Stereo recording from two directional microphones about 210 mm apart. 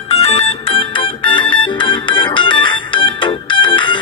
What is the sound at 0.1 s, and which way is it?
Music, 30° left (ahead or behind).